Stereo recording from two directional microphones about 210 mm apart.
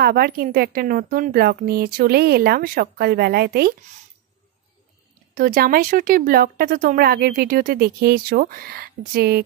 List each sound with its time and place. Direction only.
0.0 s speech: 45° right (ahead or behind)
5.3 s speech: 40° right (ahead or behind)